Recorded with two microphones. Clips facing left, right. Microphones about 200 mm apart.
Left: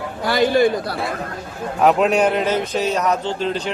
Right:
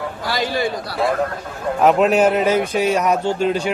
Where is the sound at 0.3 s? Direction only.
55° left (ahead or behind).